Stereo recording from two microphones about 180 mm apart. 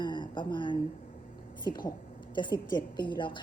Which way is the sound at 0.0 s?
25° left (ahead or behind).